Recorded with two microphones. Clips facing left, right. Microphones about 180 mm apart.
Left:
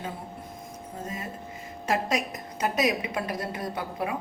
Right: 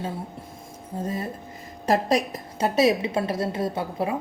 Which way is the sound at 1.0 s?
35° right (ahead or behind).